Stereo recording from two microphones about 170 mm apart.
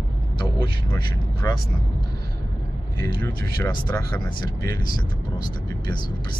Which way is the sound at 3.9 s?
15° left (ahead or behind).